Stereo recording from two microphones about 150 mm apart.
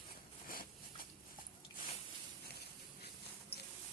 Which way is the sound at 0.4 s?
75° left (ahead or behind).